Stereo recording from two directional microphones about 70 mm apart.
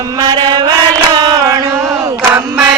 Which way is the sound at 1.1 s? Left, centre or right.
Right.